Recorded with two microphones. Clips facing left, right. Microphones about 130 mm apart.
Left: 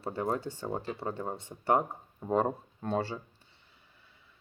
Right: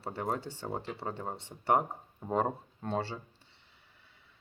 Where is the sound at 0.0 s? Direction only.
30° right (ahead or behind).